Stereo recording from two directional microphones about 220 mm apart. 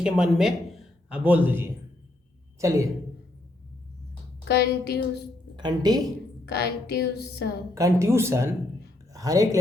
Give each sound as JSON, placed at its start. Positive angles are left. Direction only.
{"t": 0.0, "sound": "a man's voice", "side_deg": -5}
{"t": 4.4, "sound": "a woman's voice", "side_deg": 45}
{"t": 5.5, "sound": "speech", "side_deg": -20}
{"t": 6.5, "sound": "a woman's voice", "side_deg": 45}
{"t": 7.7, "sound": "speech", "side_deg": -15}